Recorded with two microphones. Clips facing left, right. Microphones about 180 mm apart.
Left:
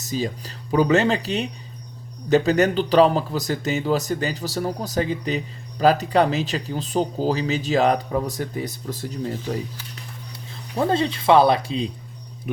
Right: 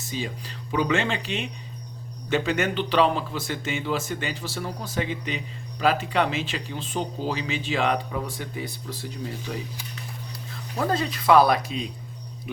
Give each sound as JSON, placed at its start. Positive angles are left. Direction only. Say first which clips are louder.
{"t": 0.0, "sound": "speech", "louder": "left 6 dB", "side_deg": 40}
{"t": 10.8, "sound": "speech", "louder": "left 5 dB", "side_deg": 25}